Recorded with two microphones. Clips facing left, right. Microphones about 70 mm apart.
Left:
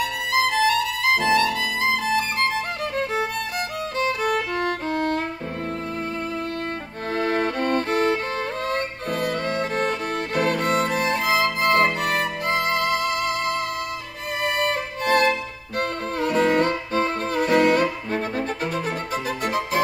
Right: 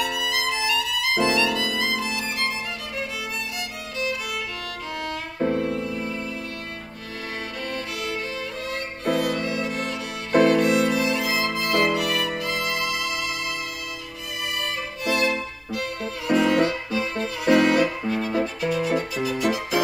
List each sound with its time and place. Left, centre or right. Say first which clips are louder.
0.3 s violin: left 5 dB; left
4.0 s music: left 6 dB; left
7.2 s music: left 10 dB; left